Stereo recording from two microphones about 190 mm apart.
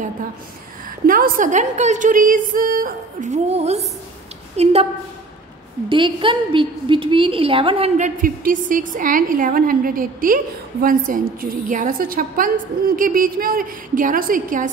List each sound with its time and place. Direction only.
0.8 s a woman's voice: 45° right (ahead or behind)
5.9 s a woman's voice: 25° right (ahead or behind)
8.0 s a woman's voice: 45° right (ahead or behind)